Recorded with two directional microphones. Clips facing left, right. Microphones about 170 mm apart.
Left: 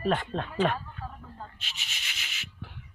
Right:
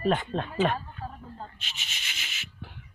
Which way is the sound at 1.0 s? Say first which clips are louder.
Right 2 dB; 35° right (ahead or behind).